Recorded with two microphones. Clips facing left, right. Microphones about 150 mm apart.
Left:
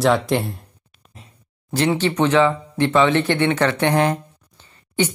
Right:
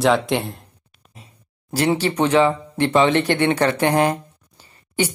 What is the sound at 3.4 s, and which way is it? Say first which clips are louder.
Speech: right 1 dB; 35° right (ahead or behind).